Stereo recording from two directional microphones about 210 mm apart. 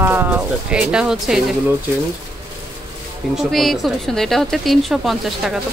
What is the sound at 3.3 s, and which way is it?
Speech, centre (ahead or behind).